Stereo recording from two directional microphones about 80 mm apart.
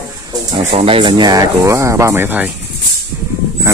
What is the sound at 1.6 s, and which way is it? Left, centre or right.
Speech, right.